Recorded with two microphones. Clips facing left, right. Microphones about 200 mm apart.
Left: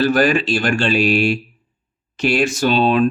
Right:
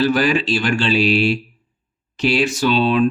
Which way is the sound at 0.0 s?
50° left (ahead or behind).